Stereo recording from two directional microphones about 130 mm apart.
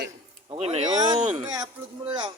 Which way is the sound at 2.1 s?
35° right (ahead or behind).